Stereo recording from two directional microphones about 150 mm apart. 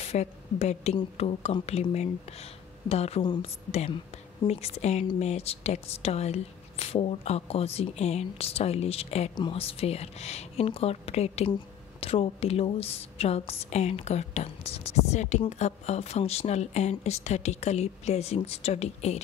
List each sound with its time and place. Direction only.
0.0 s a woman's voice: 45° left (ahead or behind)